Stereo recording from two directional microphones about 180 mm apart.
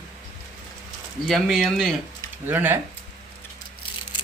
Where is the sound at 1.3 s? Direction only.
Centre (ahead or behind).